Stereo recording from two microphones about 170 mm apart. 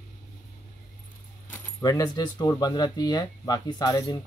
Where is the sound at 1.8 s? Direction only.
20° left (ahead or behind).